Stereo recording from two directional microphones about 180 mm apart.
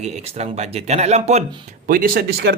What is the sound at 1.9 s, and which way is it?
Speech, 50° right (ahead or behind).